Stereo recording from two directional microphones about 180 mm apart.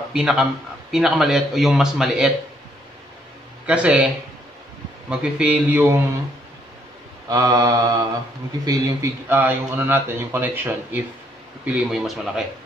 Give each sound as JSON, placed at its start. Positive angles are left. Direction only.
{"t": 0.1, "sound": "a man's voice", "side_deg": -5}
{"t": 3.6, "sound": "a man's voice", "side_deg": -5}
{"t": 5.1, "sound": "a man's voice", "side_deg": -5}
{"t": 7.2, "sound": "a man's voice", "side_deg": -20}